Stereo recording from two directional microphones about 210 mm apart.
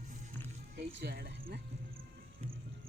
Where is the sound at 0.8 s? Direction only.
50° right (ahead or behind).